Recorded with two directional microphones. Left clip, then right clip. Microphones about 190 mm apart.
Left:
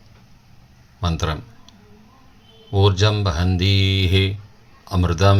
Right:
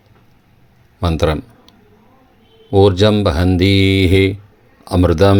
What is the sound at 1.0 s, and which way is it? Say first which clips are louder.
Speech: right 9 dB; 45° right (ahead or behind).